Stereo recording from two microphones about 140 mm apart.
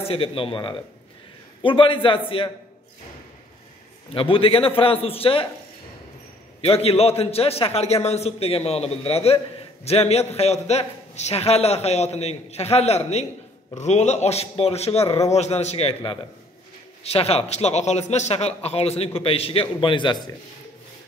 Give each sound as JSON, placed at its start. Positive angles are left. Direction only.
{"t": 0.0, "sound": "a man's voice", "side_deg": 40}
{"t": 4.1, "sound": "a man's voice", "side_deg": 40}
{"t": 6.6, "sound": "a man's voice", "side_deg": 45}